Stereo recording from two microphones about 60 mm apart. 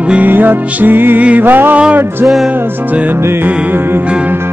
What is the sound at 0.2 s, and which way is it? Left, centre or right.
Music, right.